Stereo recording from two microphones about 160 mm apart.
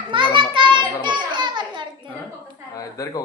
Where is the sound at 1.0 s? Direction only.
30° right (ahead or behind).